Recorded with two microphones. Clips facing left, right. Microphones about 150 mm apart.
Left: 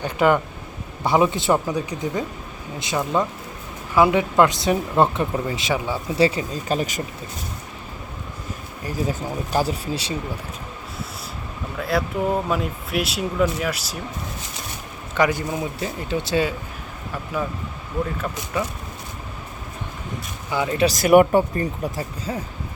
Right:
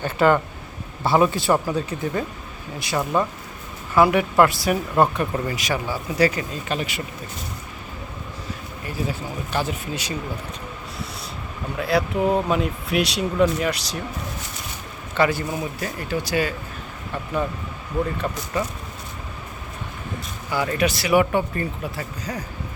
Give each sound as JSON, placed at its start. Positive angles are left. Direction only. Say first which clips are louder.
{"t": 0.0, "sound": "speech", "louder": "even", "side_deg": 15}
{"t": 8.9, "sound": "speech", "louder": "left 3 dB", "side_deg": 40}
{"t": 11.8, "sound": "speech", "louder": "right 2 dB", "side_deg": 0}
{"t": 15.1, "sound": "speech", "louder": "even", "side_deg": 15}
{"t": 18.2, "sound": "speech", "louder": "right 2 dB", "side_deg": 0}
{"t": 20.5, "sound": "speech", "louder": "left 1 dB", "side_deg": 20}
{"t": 20.8, "sound": "speech", "louder": "left 6 dB", "side_deg": 45}
{"t": 21.5, "sound": "speech", "louder": "left 3 dB", "side_deg": 25}